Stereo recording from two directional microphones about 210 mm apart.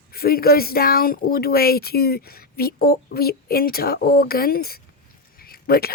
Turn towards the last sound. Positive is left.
turn(degrees=45)  # may be behind; listen again after turning